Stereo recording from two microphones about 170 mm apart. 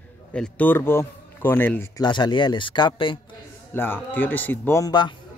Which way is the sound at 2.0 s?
25° left (ahead or behind).